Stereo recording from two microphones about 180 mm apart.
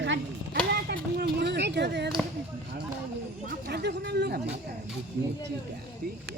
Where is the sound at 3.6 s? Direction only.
65° right (ahead or behind).